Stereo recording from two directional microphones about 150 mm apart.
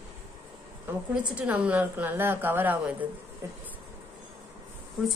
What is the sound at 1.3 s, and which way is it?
A woman's voice, 10° right (ahead or behind).